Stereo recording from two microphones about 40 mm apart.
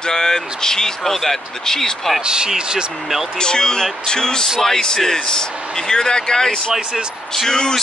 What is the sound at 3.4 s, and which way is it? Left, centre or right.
Speech, centre.